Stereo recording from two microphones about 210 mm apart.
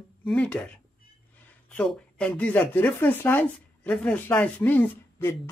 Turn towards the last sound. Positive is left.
turn(degrees=10)  # may be behind; listen again after turning